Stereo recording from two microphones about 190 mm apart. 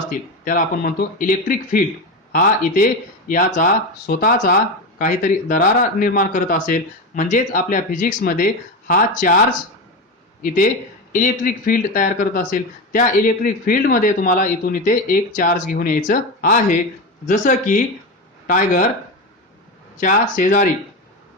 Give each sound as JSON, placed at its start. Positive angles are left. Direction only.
{"t": 0.1, "sound": "speech", "side_deg": 45}
{"t": 20.0, "sound": "speech", "side_deg": 45}